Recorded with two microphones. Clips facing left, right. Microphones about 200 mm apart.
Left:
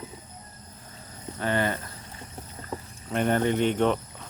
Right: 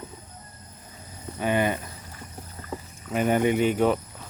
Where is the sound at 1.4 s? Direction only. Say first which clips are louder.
Right 3 dB; 15° right (ahead or behind).